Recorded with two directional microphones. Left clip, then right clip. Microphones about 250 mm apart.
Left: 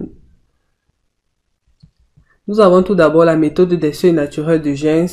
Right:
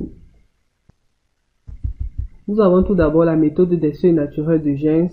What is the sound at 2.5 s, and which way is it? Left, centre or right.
Speech, centre.